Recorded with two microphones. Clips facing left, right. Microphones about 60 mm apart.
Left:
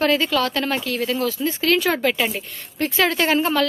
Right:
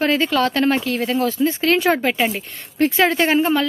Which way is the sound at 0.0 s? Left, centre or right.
Right.